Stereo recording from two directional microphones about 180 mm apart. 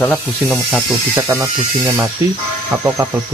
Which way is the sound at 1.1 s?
15° right (ahead or behind).